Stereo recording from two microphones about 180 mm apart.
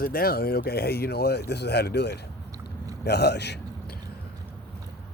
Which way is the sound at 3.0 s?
70° left (ahead or behind).